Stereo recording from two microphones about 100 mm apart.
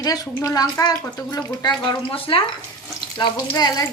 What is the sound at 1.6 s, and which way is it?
Stir, 45° left (ahead or behind).